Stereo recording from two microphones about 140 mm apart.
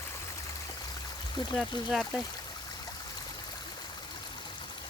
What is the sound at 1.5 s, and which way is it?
Speech, centre (ahead or behind).